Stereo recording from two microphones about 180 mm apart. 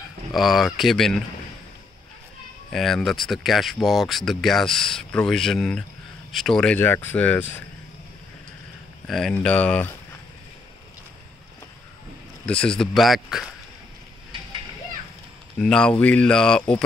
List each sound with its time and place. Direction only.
0.3 s speech: centre (ahead or behind)
2.7 s speech: centre (ahead or behind)
9.0 s speech: centre (ahead or behind)
12.4 s speech: 5° left (ahead or behind)
15.6 s speech: 5° left (ahead or behind)